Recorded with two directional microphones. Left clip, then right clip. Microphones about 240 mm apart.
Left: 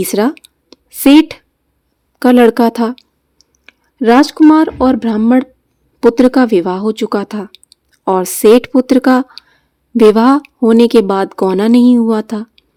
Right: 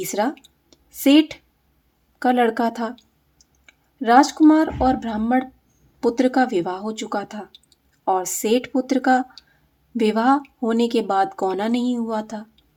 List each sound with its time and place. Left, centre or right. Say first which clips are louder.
0.0 s a woman's voice: left 9 dB; left